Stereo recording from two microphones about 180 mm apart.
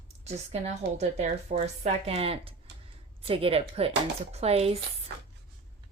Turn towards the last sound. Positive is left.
turn(degrees=-35)  # may be behind; listen again after turning